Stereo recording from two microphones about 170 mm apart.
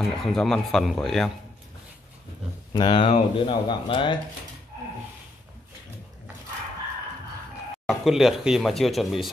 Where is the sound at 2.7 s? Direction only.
30° left (ahead or behind).